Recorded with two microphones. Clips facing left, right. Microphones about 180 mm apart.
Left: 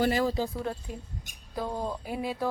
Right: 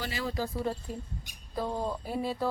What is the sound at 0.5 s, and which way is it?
A woman's voice, 5° right (ahead or behind).